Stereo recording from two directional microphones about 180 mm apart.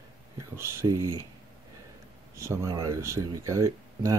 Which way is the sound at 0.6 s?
15° right (ahead or behind).